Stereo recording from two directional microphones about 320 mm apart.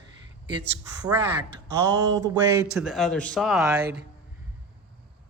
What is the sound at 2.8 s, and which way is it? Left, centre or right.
Speech, centre.